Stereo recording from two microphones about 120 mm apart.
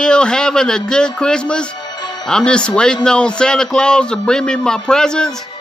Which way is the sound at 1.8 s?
35° left (ahead or behind).